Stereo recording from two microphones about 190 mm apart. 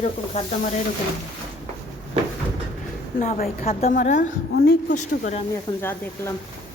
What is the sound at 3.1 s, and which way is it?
A woman's voice, 40° left (ahead or behind).